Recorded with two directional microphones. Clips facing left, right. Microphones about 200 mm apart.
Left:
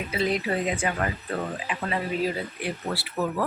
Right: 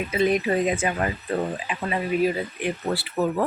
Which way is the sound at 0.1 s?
15° right (ahead or behind).